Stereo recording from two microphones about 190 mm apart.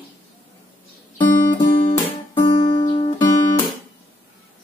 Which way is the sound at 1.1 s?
25° left (ahead or behind).